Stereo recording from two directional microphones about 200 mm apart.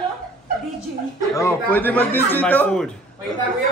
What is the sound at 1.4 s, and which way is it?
A man's voice, 10° left (ahead or behind).